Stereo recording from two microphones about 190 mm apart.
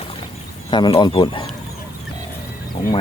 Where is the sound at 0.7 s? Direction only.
25° left (ahead or behind).